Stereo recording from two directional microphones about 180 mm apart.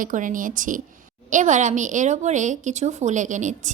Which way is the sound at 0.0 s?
45° right (ahead or behind).